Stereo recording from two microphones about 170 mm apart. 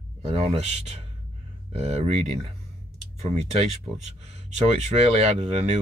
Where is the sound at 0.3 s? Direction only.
40° right (ahead or behind).